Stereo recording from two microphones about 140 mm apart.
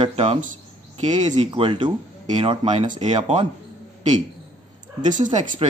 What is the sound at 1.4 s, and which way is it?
Speech, 35° right (ahead or behind).